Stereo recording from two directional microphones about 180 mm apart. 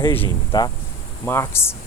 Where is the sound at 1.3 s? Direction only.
15° left (ahead or behind).